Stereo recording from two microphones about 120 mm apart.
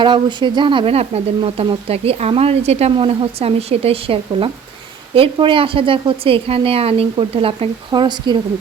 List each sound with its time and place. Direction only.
0.0 s speech: 40° right (ahead or behind)